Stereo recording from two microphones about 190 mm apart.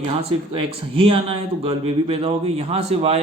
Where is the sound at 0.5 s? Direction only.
30° right (ahead or behind).